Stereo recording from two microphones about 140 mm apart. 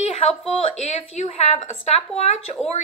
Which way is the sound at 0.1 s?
45° left (ahead or behind).